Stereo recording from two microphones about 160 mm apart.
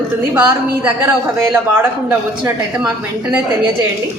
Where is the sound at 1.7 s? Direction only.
10° right (ahead or behind).